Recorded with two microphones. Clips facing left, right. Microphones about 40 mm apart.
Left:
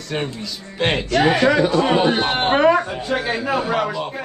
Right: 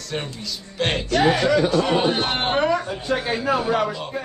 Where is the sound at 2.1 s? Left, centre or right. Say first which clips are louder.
Left 4 dB; centre.